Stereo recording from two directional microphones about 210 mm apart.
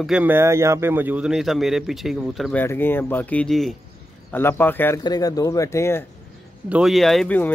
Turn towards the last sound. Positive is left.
turn(degrees=5)  # may be behind; listen again after turning